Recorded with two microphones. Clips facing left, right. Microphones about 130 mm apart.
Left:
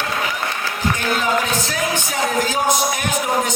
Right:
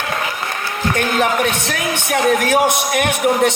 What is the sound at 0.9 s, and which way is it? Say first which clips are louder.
Speech: right 4 dB; 65° right (ahead or behind).